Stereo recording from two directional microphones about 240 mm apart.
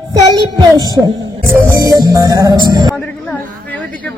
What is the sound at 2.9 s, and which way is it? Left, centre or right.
Speech, centre.